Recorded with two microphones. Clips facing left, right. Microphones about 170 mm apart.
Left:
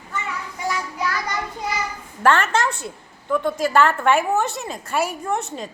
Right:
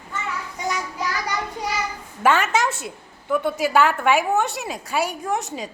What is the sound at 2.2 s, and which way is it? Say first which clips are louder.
A woman's voice: left 1 dB; centre (ahead or behind).